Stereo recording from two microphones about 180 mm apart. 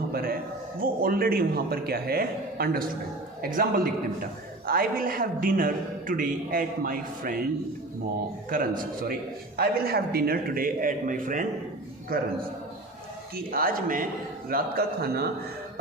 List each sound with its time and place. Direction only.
0.1 s a man's voice: 55° right (ahead or behind)
8.4 s a man's voice: 50° right (ahead or behind)
13.3 s a man's voice: 55° right (ahead or behind)